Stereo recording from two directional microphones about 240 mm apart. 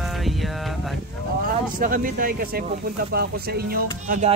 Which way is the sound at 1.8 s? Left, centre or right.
Right.